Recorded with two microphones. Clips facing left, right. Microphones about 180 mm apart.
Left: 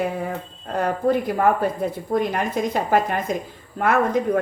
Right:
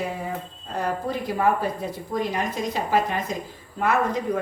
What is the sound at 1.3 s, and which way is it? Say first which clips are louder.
A woman's voice: left 3 dB; 55° left (ahead or behind).